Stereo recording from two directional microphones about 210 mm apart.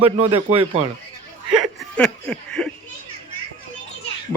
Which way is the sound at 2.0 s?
5° left (ahead or behind).